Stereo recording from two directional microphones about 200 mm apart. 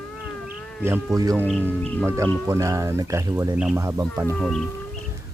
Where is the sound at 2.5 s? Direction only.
15° right (ahead or behind).